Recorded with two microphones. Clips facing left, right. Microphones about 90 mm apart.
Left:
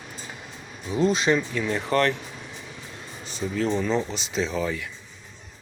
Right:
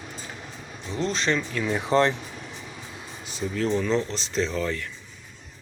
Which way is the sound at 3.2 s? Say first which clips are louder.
Left 1 dB; centre (ahead or behind).